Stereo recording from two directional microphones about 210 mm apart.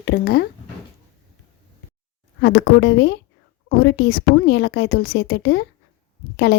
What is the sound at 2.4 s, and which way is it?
Speech, 50° left (ahead or behind).